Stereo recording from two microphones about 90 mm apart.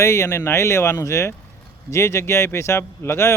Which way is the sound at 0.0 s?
35° left (ahead or behind).